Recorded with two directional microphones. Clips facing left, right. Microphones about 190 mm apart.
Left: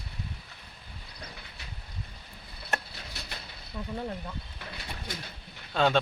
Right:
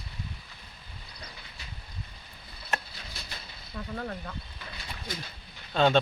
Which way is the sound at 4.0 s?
15° left (ahead or behind).